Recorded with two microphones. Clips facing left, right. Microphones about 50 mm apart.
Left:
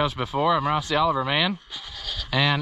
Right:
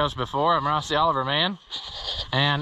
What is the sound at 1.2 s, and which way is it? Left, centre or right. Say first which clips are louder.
Speech: left 1 dB; left.